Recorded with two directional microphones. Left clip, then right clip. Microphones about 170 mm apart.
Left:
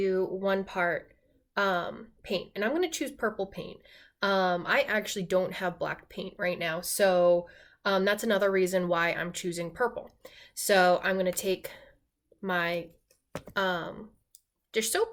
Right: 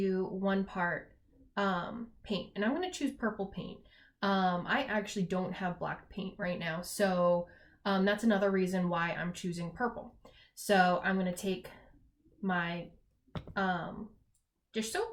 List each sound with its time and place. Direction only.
0.0 s a woman's voice: 35° left (ahead or behind)